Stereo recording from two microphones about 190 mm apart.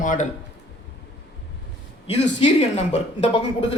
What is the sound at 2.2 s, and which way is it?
A woman's voice, 35° left (ahead or behind).